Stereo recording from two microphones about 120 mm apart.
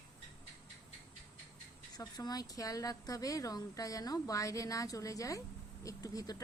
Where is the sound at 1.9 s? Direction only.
35° left (ahead or behind).